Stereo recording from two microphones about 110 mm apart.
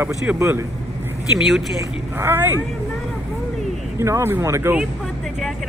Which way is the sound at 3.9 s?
25° right (ahead or behind).